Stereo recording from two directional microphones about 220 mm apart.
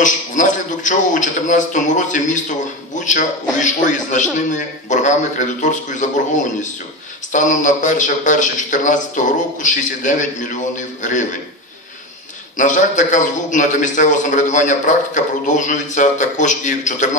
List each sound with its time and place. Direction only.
0.0 s a man's voice: 35° left (ahead or behind)
7.3 s a man's voice: 35° left (ahead or behind)
12.5 s a man's voice: 35° left (ahead or behind)